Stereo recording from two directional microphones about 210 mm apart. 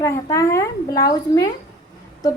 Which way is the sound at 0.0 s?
15° left (ahead or behind).